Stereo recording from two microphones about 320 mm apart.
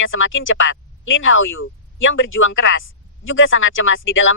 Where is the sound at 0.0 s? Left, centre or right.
Left.